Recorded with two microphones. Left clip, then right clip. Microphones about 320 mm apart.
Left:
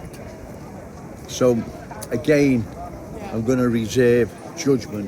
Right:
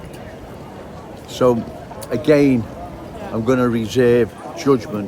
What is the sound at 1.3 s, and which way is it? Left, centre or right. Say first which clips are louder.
A man's voice: right 3 dB; centre.